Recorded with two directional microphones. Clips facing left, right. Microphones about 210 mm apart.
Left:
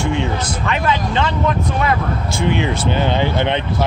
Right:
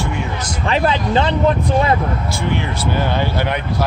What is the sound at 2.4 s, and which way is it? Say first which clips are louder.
Speech: left 6 dB; 20° left (ahead or behind).